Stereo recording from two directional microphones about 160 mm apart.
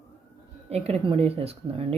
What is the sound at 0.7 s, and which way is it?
Speech, 40° right (ahead or behind).